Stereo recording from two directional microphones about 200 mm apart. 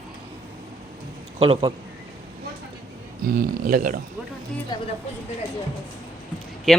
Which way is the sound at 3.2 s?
45° right (ahead or behind).